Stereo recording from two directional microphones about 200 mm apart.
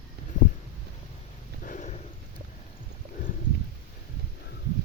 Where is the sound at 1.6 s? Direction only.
40° left (ahead or behind).